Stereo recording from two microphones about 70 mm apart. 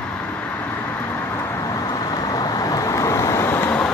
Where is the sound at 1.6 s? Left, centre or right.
Left.